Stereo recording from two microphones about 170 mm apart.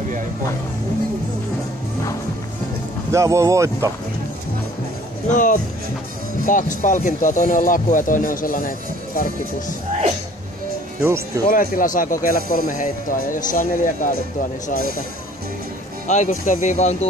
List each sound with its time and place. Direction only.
3.1 s speech: 15° right (ahead or behind)
5.3 s speech: 50° left (ahead or behind)
11.0 s speech: 15° right (ahead or behind)
11.4 s speech: 55° left (ahead or behind)
16.1 s speech: 45° left (ahead or behind)